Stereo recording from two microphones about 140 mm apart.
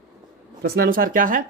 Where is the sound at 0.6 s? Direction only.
90° right; by 1.4 s 75° right (ahead or behind).